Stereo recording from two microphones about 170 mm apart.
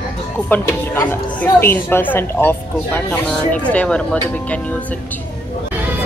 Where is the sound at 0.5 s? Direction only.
10° left (ahead or behind).